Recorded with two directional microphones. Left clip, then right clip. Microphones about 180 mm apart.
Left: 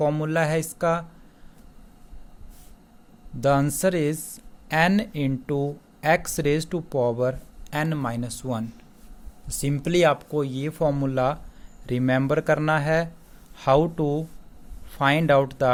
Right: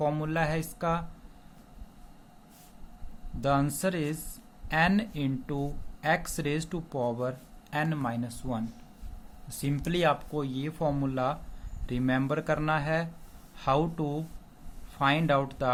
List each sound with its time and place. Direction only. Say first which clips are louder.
0.0 s speech: left 6 dB; 35° left (ahead or behind)
3.4 s speech: left 7 dB; 35° left (ahead or behind)